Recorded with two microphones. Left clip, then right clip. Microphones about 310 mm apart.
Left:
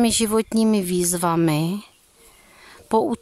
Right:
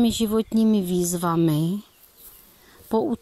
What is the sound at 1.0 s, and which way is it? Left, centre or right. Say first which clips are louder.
Speech: left 3 dB; centre.